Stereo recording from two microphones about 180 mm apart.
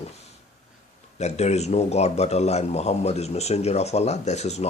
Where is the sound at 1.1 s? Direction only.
35° left (ahead or behind).